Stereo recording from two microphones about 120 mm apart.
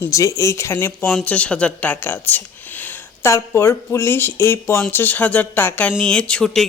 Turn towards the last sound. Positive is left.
turn(degrees=5)  # may be behind; listen again after turning